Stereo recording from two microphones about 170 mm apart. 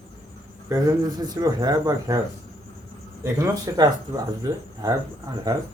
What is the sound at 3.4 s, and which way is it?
Speech, 20° right (ahead or behind).